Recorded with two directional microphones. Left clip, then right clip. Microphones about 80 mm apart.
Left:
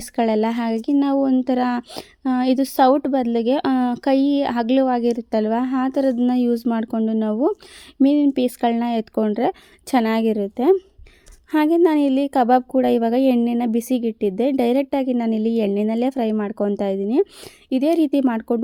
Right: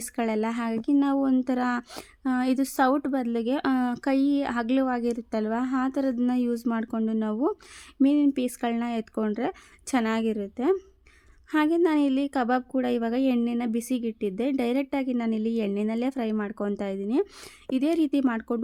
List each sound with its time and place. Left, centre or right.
0.0 s a woman's voice: left